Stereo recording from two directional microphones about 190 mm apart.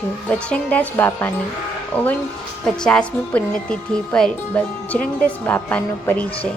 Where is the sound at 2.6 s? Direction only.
5° left (ahead or behind).